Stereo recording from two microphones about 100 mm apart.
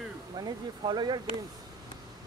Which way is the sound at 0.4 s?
45° right (ahead or behind).